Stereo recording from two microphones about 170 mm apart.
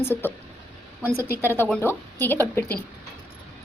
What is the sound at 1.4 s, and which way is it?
A woman's voice, 10° left (ahead or behind).